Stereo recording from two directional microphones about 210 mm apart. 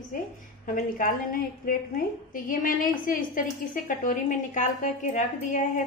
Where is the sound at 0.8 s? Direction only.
40° left (ahead or behind).